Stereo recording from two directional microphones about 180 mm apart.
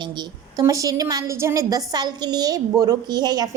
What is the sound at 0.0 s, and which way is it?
A woman's voice, 25° right (ahead or behind).